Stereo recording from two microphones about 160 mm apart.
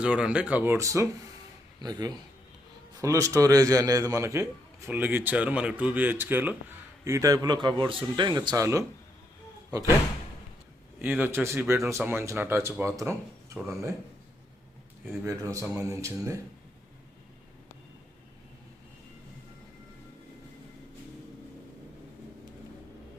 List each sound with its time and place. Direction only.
0.0 s a man's voice: 5° right (ahead or behind)
11.0 s speech: 10° right (ahead or behind)
15.2 s a man's voice: 20° right (ahead or behind)